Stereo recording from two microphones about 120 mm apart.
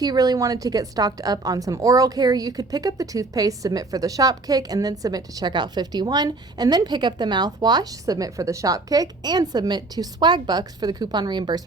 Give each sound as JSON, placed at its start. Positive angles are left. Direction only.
{"t": 0.0, "sound": "a woman's voice", "side_deg": -35}